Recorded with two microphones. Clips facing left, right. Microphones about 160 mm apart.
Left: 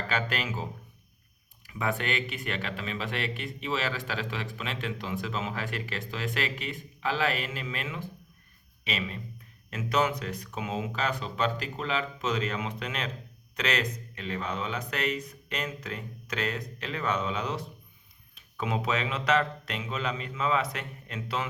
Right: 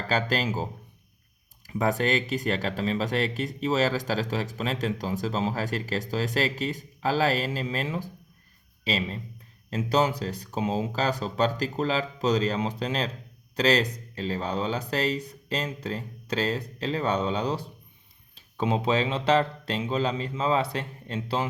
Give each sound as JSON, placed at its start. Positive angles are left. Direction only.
{"t": 0.1, "sound": "speech", "side_deg": -35}